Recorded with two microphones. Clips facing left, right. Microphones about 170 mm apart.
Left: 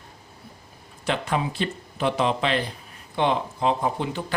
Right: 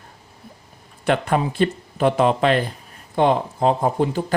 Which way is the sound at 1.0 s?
55° right (ahead or behind).